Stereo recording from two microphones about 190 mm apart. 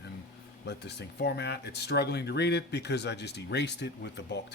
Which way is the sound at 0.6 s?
60° left (ahead or behind).